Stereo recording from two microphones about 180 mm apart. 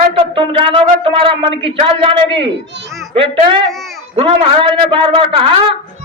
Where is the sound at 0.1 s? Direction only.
30° right (ahead or behind).